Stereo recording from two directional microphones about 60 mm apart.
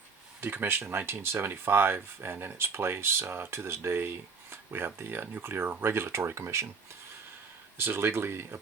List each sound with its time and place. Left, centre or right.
0.4 s speech: right
7.8 s speech: right